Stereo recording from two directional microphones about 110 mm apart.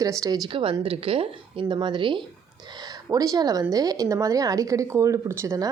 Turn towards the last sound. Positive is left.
turn(degrees=-30)  # may be behind; listen again after turning